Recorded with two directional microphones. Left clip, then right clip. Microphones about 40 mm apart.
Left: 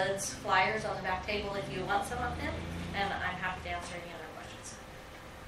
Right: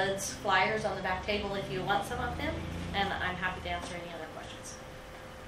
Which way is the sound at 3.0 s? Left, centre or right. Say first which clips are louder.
Right 1 dB; centre.